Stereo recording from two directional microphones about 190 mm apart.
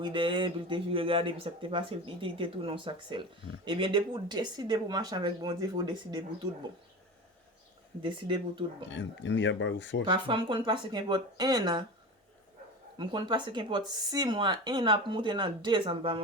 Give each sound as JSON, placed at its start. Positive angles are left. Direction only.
{"t": 0.0, "sound": "speech", "side_deg": -25}
{"t": 8.0, "sound": "speech", "side_deg": -25}
{"t": 8.9, "sound": "speech", "side_deg": 75}
{"t": 10.1, "sound": "speech", "side_deg": -25}
{"t": 13.0, "sound": "speech", "side_deg": -25}